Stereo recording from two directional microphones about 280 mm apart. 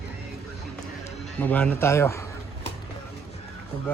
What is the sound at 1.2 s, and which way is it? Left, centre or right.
Speech, centre.